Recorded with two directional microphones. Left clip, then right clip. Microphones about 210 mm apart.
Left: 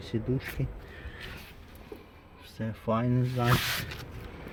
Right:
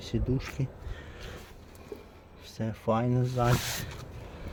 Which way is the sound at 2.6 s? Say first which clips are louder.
Right 1 dB; 10° right (ahead or behind).